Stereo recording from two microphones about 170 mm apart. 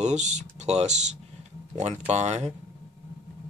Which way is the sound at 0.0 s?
45° right (ahead or behind).